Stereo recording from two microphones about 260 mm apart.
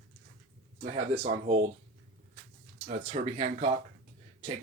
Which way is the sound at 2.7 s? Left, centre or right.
Right.